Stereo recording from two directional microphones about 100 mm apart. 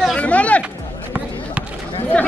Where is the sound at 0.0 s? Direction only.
10° left (ahead or behind).